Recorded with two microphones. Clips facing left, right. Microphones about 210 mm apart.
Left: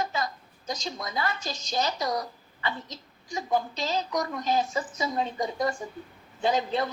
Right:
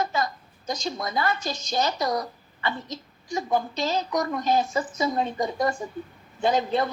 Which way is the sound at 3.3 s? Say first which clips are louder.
Right 2 dB; 60° right (ahead or behind).